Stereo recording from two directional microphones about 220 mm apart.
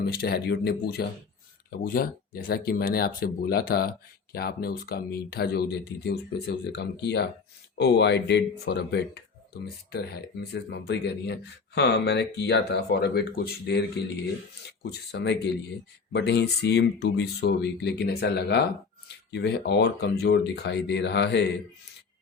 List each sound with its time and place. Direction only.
0.0 s speech: 45° left (ahead or behind)